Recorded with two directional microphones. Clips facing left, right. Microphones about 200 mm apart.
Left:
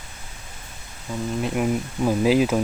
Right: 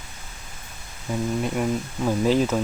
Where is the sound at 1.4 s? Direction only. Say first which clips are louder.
Left 5 dB; 5° left (ahead or behind).